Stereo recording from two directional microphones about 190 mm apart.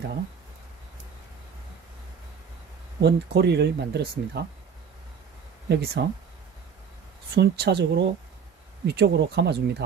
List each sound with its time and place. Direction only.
3.0 s speech: 65° right (ahead or behind)
5.7 s speech: 65° right (ahead or behind)
7.3 s speech: 60° right (ahead or behind)